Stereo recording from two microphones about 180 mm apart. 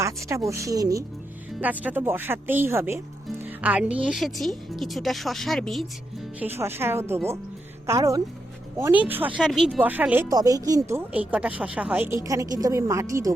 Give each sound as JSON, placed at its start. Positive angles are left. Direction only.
{"t": 0.0, "sound": "speech", "side_deg": -15}
{"t": 6.4, "sound": "speech", "side_deg": -10}